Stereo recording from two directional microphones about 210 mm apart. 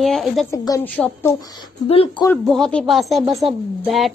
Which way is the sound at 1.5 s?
25° left (ahead or behind).